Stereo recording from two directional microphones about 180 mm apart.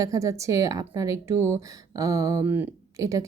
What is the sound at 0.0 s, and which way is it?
Speech, 20° right (ahead or behind).